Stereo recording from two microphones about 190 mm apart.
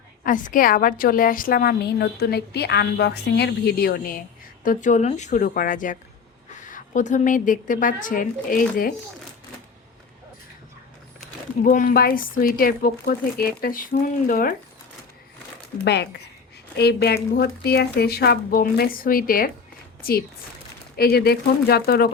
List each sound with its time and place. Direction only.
0.3 s a woman's voice: 45° left (ahead or behind)
4.6 s a woman's voice: 45° left (ahead or behind)
11.6 s a woman's voice: 45° left (ahead or behind)
15.8 s a woman's voice: 60° left (ahead or behind)